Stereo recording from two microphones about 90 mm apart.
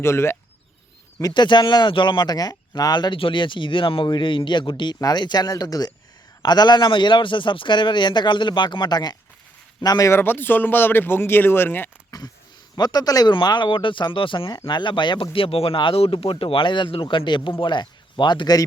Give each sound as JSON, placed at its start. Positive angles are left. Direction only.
{"t": 0.0, "sound": "speech", "side_deg": 30}
{"t": 1.3, "sound": "speech", "side_deg": 60}
{"t": 10.1, "sound": "speech", "side_deg": 25}
{"t": 12.1, "sound": "a sound", "side_deg": 40}
{"t": 12.7, "sound": "speech", "side_deg": 50}
{"t": 13.3, "sound": "speech", "side_deg": 55}
{"t": 14.7, "sound": "speech", "side_deg": 60}